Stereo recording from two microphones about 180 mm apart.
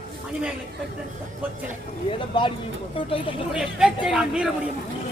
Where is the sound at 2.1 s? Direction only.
25° left (ahead or behind).